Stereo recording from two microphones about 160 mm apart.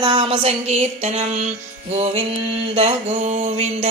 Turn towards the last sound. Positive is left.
turn(degrees=-45)  # may be behind; listen again after turning